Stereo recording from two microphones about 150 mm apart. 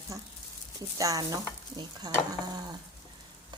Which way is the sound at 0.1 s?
25° right (ahead or behind).